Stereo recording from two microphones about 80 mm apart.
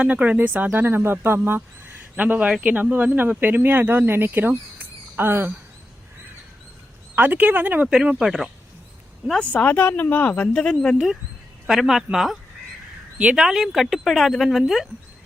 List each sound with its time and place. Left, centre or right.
0.0 s speech: centre
7.2 s speech: right
9.4 s speech: centre